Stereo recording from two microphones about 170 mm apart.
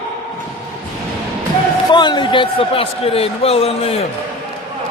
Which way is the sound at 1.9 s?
25° left (ahead or behind).